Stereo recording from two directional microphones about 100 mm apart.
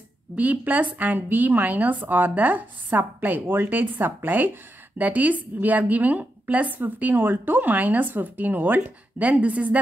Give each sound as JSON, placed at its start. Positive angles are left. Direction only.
{"t": 0.4, "sound": "a woman's voice", "side_deg": -15}